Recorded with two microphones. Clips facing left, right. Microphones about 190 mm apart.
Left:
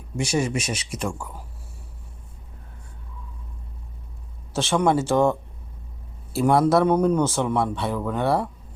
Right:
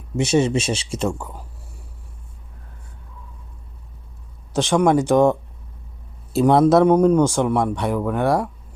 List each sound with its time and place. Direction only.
0.2 s speech: 25° right (ahead or behind)
4.5 s speech: 15° right (ahead or behind)